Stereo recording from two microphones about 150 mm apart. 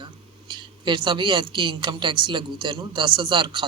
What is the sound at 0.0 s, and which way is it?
A woman's voice, 30° right (ahead or behind).